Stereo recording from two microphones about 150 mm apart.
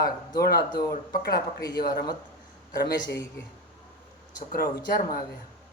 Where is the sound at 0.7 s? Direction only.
30° left (ahead or behind).